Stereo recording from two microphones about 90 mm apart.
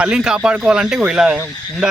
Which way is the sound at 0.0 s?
10° right (ahead or behind).